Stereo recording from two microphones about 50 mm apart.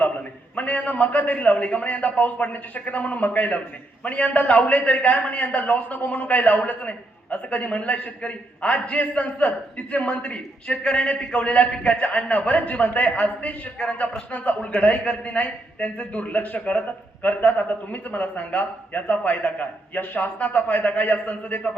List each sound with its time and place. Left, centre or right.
0.5 s a man's voice: left